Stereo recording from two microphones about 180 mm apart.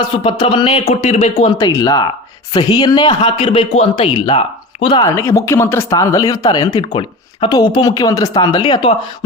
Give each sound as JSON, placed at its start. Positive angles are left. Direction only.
{"t": 0.3, "sound": "a man's voice", "side_deg": 30}
{"t": 5.0, "sound": "a man's voice", "side_deg": 15}